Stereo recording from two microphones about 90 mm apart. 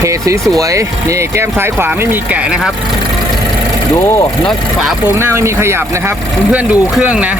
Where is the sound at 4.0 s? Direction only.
30° left (ahead or behind).